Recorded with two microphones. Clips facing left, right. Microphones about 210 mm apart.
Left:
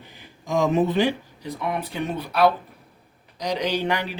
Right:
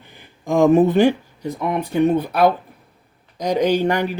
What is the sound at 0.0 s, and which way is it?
Speech, 55° right (ahead or behind).